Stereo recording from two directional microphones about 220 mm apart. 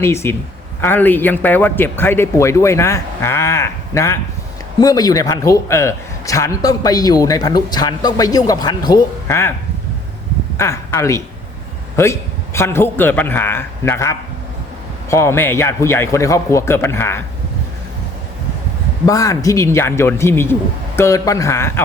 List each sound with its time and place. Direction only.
0.0 s a man's voice: 10° left (ahead or behind)
10.6 s a woman's voice: 10° left (ahead or behind)
19.0 s a man's voice: 15° left (ahead or behind)